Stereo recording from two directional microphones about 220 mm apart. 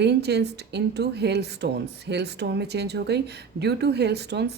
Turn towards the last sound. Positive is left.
turn(degrees=-50)  # may be behind; listen again after turning